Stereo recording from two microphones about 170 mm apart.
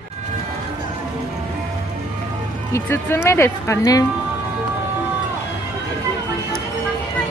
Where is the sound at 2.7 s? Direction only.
15° left (ahead or behind).